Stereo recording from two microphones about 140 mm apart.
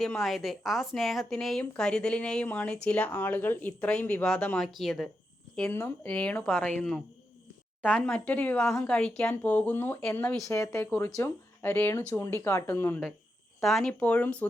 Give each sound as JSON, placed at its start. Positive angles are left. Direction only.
{"t": 0.0, "sound": "speech", "side_deg": 0}
{"t": 5.5, "sound": "speech", "side_deg": 10}
{"t": 8.5, "sound": "speech", "side_deg": 0}
{"t": 13.6, "sound": "speech", "side_deg": 0}